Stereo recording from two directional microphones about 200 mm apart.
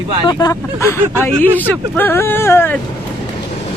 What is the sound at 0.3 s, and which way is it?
Speech, 15° left (ahead or behind).